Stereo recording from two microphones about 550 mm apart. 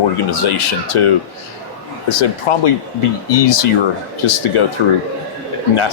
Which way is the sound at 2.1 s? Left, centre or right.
Left.